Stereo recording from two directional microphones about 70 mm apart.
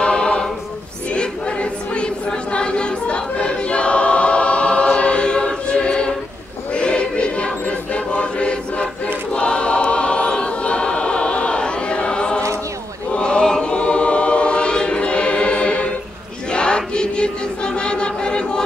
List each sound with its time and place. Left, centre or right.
0.0 s choir: centre